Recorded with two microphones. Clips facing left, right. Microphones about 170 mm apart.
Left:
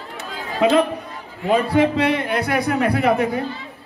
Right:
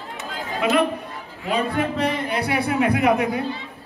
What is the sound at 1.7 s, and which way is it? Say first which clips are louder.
Speech: left 6 dB; 70° left (ahead or behind).